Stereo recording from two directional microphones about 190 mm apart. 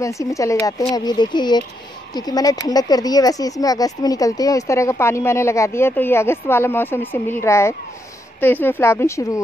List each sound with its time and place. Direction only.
0.0 s speech: 15° left (ahead or behind)